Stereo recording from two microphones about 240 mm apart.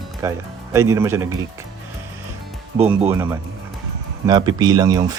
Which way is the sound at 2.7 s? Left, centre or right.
Right.